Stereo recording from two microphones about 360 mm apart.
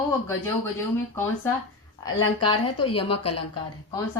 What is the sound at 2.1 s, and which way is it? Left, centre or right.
A woman's voice, centre.